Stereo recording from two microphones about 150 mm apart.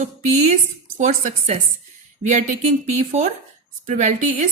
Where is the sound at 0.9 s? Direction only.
55° right (ahead or behind).